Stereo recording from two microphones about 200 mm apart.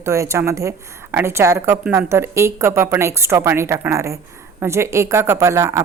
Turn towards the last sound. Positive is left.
turn(degrees=-15)  # may be behind; listen again after turning